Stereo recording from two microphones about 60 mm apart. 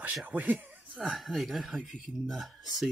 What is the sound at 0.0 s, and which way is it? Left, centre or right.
Speech, right.